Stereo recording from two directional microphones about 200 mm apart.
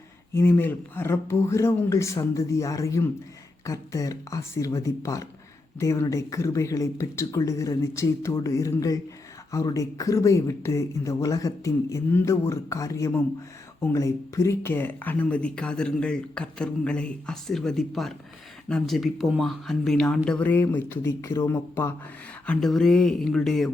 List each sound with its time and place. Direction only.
0.3 s speech: 10° left (ahead or behind)